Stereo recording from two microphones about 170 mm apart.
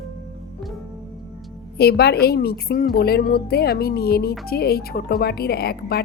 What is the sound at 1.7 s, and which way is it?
A woman's voice, 70° left (ahead or behind).